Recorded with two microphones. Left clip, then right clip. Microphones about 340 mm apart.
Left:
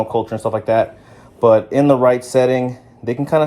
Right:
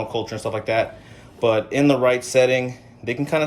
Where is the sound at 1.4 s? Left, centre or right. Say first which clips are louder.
Left 7 dB; left.